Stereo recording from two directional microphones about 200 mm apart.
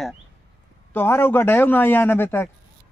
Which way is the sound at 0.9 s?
10° left (ahead or behind).